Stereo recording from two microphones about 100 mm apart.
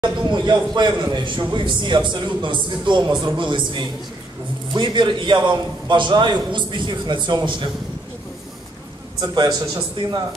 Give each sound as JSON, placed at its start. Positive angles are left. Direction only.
{"t": 0.0, "sound": "a man's voice", "side_deg": -50}
{"t": 9.2, "sound": "a man's voice", "side_deg": -45}
{"t": 10.0, "sound": "a man's voice", "side_deg": -55}